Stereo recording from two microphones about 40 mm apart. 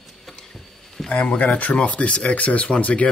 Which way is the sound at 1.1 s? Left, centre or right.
Left.